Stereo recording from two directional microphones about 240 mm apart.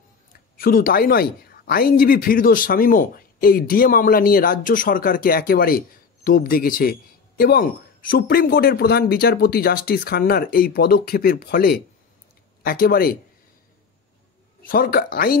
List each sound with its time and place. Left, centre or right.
0.6 s speech: left
14.6 s speech: left